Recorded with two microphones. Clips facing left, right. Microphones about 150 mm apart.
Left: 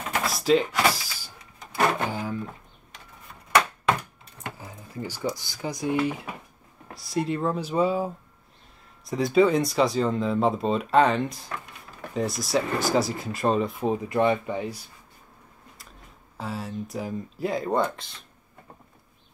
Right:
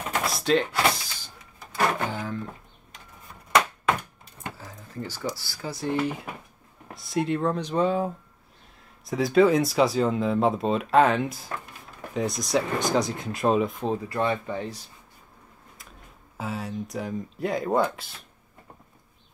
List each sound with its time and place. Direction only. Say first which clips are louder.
0.2 s power windows: left 2 dB; centre (ahead or behind)
4.6 s speech: left 1 dB; 15° left (ahead or behind)
5.9 s speech: left 1 dB; 5° left (ahead or behind)
13.7 s speech: left 3 dB; 15° left (ahead or behind)
16.3 s speech: right 1 dB; centre (ahead or behind)